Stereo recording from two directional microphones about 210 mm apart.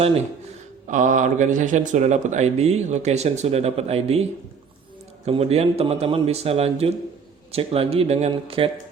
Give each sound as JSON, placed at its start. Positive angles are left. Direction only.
{"t": 0.9, "sound": "speech", "side_deg": -35}